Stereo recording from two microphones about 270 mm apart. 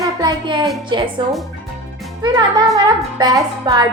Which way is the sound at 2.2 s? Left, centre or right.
Centre.